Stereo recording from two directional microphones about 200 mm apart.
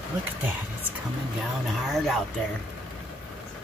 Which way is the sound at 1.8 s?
Centre (ahead or behind).